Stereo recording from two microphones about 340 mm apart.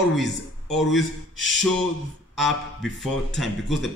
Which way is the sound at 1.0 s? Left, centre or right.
Left.